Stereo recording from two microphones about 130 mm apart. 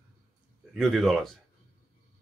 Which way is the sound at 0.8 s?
Centre (ahead or behind).